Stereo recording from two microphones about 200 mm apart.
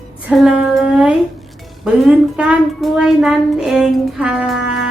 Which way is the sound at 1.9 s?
Centre (ahead or behind).